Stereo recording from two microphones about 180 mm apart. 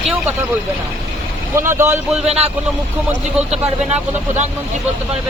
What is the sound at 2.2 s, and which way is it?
Speech, 35° right (ahead or behind).